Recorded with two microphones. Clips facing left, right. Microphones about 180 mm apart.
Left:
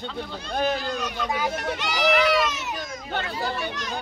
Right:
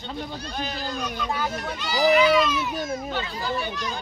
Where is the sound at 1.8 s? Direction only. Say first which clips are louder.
Right 4 dB; 85° left.